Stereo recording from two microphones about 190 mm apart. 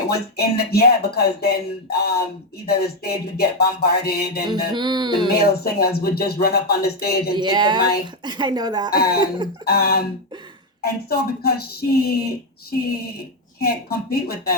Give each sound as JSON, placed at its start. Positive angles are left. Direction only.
{"t": 0.1, "sound": "speech", "side_deg": 55}
{"t": 4.7, "sound": "a woman's voice", "side_deg": -25}
{"t": 5.3, "sound": "speech", "side_deg": 55}
{"t": 7.3, "sound": "a woman's voice", "side_deg": -20}
{"t": 8.9, "sound": "speech", "side_deg": 55}
{"t": 13.6, "sound": "speech", "side_deg": 55}